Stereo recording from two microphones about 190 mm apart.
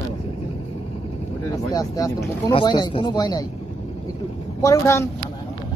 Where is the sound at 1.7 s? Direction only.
20° left (ahead or behind).